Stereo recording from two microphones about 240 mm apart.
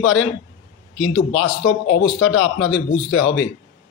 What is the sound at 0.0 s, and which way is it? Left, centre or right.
Speech, left.